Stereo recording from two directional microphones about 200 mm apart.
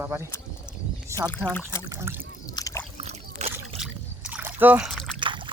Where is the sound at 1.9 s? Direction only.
15° right (ahead or behind).